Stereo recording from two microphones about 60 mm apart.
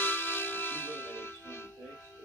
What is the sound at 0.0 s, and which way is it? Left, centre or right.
Music, left.